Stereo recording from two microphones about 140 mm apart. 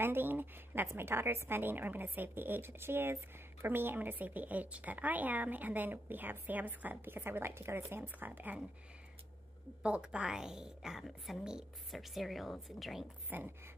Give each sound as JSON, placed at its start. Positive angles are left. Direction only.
{"t": 0.0, "sound": "a woman's voice", "side_deg": -15}
{"t": 9.8, "sound": "a woman's voice", "side_deg": -10}
{"t": 13.3, "sound": "a woman's voice", "side_deg": -15}